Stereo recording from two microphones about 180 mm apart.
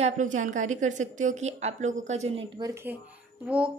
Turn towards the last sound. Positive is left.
turn(degrees=-5)  # may be behind; listen again after turning